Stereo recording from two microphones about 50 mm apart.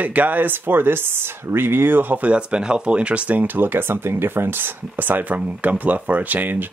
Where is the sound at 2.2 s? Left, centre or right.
Right.